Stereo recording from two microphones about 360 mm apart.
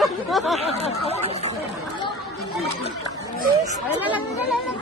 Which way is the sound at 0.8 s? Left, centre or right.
Centre.